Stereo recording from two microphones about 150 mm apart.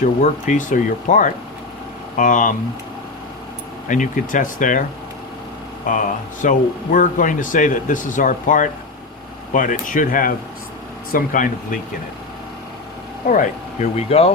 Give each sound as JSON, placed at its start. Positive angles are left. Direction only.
{"t": 0.0, "sound": "speech", "side_deg": 55}
{"t": 3.8, "sound": "speech", "side_deg": 60}
{"t": 5.8, "sound": "speech", "side_deg": 60}
{"t": 13.3, "sound": "speech", "side_deg": 50}